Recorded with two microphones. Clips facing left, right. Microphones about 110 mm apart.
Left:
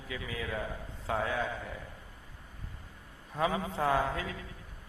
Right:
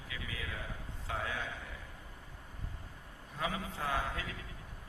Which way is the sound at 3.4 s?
35° left (ahead or behind).